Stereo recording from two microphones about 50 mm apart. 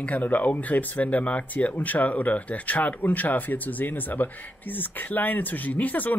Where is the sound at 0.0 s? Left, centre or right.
Left.